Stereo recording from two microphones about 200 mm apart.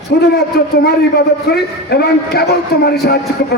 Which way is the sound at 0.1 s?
55° left (ahead or behind).